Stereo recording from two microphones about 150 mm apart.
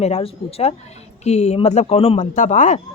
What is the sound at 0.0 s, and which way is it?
Speech, 45° left (ahead or behind).